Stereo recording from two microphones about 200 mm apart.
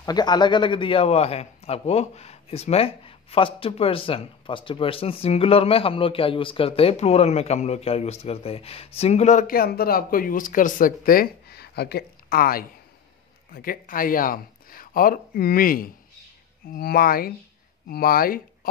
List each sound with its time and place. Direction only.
0.0 s a man's voice: 20° left (ahead or behind); by 18.7 s 45° left (ahead or behind)